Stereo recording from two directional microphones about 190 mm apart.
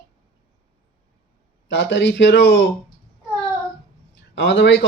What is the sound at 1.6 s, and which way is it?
Speech, 75° left (ahead or behind).